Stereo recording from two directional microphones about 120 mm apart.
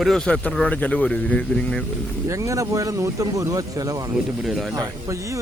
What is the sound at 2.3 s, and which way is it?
Speech, 25° right (ahead or behind).